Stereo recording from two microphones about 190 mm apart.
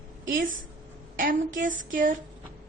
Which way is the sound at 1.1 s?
45° right (ahead or behind).